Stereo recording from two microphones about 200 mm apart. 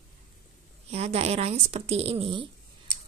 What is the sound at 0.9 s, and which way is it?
A woman's voice, 30° right (ahead or behind).